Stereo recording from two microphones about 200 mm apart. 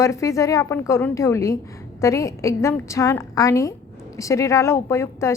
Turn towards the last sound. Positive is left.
turn(degrees=15)  # may be behind; listen again after turning